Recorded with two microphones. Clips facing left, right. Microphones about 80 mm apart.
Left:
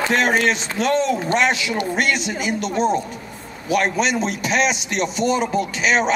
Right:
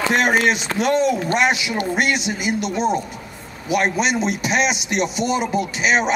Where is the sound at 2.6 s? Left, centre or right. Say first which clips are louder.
Left 1 dB; left.